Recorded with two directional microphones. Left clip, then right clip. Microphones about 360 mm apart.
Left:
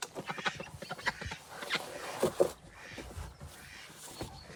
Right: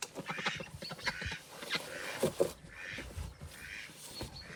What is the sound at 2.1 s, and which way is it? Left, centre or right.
Cat, centre.